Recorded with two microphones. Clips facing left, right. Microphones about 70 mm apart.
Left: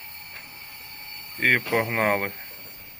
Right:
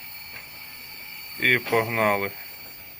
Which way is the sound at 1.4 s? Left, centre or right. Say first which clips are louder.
Even; left.